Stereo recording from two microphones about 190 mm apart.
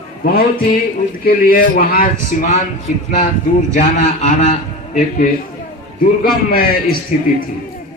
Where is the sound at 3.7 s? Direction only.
40° left (ahead or behind).